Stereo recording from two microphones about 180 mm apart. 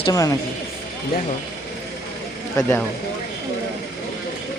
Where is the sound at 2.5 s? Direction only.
10° left (ahead or behind).